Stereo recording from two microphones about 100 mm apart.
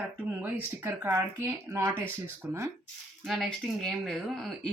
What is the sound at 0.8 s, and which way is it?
Speech, 20° right (ahead or behind).